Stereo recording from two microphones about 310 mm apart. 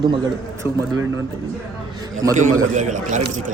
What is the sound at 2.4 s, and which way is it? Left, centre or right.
A man's voice, right.